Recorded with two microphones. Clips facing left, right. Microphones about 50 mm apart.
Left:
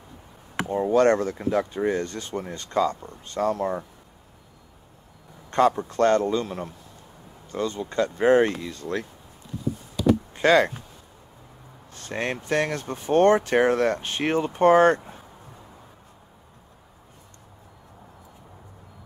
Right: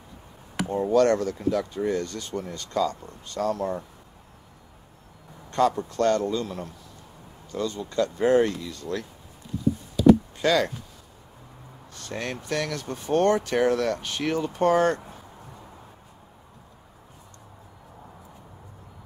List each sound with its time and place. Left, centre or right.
0.7 s speech: left
5.5 s speech: left
10.3 s speech: left
11.9 s speech: left